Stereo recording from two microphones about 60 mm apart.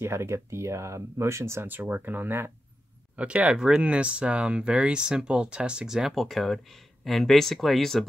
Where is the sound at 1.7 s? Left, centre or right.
Right.